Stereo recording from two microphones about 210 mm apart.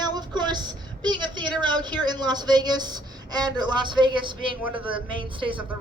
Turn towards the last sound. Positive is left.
turn(degrees=-25)  # may be behind; listen again after turning